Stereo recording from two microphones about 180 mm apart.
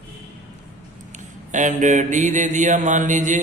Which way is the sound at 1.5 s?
45° right (ahead or behind).